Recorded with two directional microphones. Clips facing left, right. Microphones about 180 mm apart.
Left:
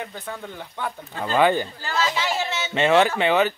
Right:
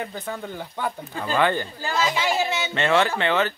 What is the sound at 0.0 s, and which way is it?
Speech, centre (ahead or behind).